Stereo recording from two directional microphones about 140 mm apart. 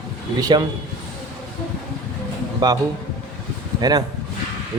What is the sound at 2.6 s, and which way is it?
Speech, 30° right (ahead or behind).